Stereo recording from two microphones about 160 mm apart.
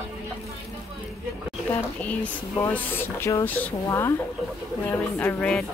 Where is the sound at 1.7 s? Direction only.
10° left (ahead or behind).